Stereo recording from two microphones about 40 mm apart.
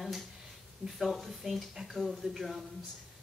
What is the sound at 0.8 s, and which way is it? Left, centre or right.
Speech, centre.